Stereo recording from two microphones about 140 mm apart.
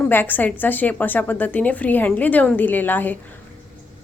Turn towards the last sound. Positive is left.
turn(degrees=15)  # may be behind; listen again after turning